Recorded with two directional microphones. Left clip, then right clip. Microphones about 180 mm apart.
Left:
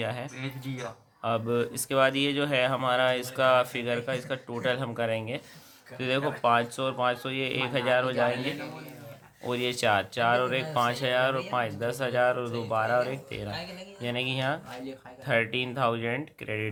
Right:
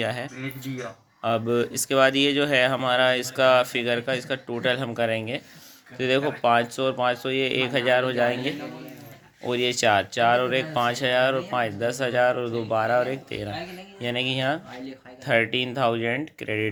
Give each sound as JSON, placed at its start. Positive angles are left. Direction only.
{"t": 0.0, "sound": "speech", "side_deg": -15}